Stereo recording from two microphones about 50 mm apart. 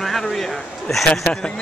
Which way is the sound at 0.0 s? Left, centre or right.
Centre.